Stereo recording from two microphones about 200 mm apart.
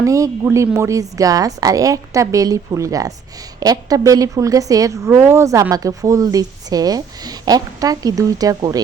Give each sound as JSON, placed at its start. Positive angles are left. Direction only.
{"t": 0.0, "sound": "a woman's voice", "side_deg": -15}